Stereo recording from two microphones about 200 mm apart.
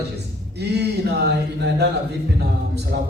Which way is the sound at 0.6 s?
55° right (ahead or behind).